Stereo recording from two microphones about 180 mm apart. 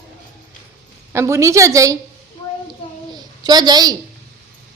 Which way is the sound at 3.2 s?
25° right (ahead or behind).